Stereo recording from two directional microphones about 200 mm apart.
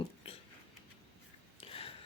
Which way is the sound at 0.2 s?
30° left (ahead or behind).